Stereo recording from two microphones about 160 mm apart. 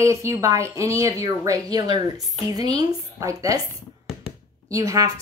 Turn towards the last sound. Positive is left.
turn(degrees=-20)  # may be behind; listen again after turning